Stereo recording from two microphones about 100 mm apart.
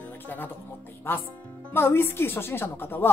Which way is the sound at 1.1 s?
25° left (ahead or behind).